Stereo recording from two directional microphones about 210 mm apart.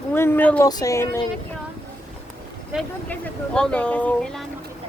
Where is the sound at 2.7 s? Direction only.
5° left (ahead or behind).